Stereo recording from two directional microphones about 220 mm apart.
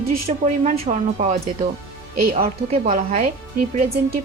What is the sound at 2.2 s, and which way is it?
Speech, 40° right (ahead or behind).